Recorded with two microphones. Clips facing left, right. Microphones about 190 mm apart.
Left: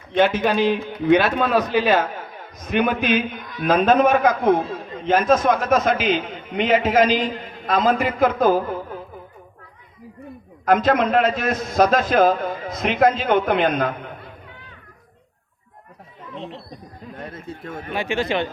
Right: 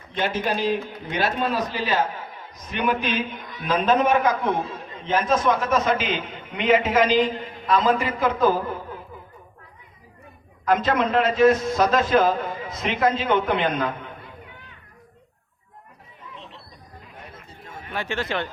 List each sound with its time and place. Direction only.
0.1 s a man's voice: 65° left (ahead or behind); by 9.0 s 45° left (ahead or behind)
10.7 s a man's voice: 45° left (ahead or behind)
17.2 s a sound: 65° left (ahead or behind)
17.9 s speech: 15° left (ahead or behind)